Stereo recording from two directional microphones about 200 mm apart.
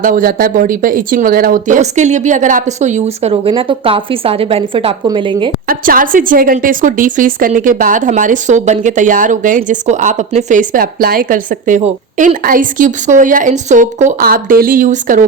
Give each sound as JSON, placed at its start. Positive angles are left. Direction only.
{"t": 0.0, "sound": "a woman's voice", "side_deg": -45}
{"t": 5.6, "sound": "a woman's voice", "side_deg": -45}